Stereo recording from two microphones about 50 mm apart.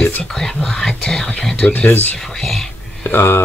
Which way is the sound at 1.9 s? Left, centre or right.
Left.